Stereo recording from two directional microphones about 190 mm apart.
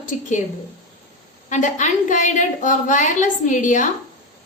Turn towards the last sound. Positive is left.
turn(degrees=40)  # may be behind; listen again after turning